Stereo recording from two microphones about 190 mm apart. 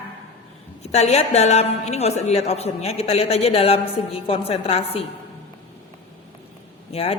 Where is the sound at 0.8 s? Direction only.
35° left (ahead or behind).